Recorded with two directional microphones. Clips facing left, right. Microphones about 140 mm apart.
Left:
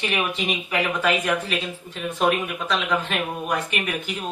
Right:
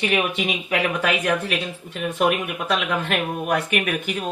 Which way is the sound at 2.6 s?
60° right (ahead or behind).